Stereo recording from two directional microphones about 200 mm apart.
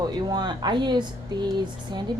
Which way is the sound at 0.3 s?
20° right (ahead or behind).